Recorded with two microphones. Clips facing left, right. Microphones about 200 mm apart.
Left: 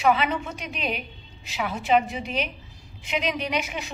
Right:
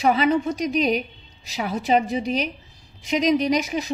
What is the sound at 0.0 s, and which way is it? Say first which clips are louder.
A woman's voice: right 4 dB; 40° right (ahead or behind).